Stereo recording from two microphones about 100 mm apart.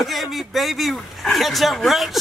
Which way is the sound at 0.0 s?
Centre (ahead or behind).